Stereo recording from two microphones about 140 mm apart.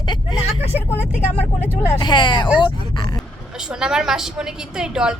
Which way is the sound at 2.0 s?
30° left (ahead or behind).